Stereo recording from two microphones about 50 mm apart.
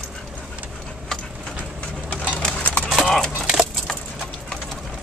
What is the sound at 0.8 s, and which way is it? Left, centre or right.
Tick-tock, centre.